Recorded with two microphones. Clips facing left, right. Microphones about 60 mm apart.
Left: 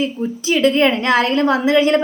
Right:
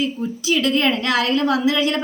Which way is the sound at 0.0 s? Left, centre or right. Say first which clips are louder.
Left 2 dB; left.